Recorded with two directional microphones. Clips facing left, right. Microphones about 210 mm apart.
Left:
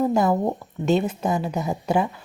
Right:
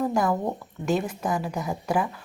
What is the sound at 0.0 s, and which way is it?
Speech, 25° left (ahead or behind).